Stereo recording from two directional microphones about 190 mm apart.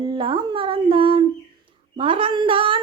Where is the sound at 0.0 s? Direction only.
25° right (ahead or behind).